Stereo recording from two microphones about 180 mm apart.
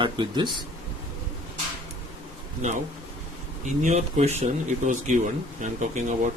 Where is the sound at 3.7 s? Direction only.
40° right (ahead or behind).